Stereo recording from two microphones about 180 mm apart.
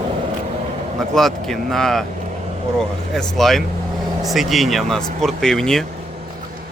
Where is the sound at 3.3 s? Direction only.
Centre (ahead or behind).